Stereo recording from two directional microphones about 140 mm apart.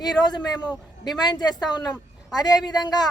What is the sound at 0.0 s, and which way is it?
Speech, 30° left (ahead or behind).